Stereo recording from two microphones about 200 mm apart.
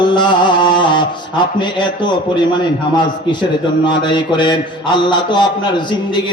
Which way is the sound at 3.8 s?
25° left (ahead or behind).